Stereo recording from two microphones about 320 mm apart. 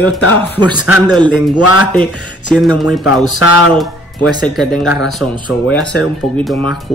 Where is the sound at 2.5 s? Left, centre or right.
Centre.